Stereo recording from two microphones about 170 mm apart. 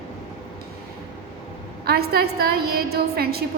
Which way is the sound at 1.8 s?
65° right (ahead or behind).